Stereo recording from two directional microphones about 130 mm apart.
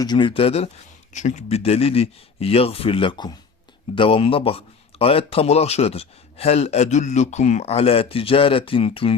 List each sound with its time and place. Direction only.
0.0 s a man's voice: 35° left (ahead or behind)
1.1 s a man's voice: 65° left (ahead or behind); by 9.1 s 45° left (ahead or behind)